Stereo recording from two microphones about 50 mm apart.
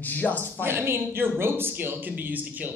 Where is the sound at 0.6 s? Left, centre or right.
Right.